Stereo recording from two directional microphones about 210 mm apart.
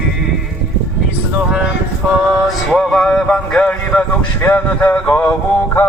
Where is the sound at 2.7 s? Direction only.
Centre (ahead or behind).